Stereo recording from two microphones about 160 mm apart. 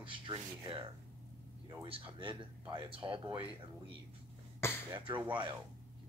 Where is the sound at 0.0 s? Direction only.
30° right (ahead or behind).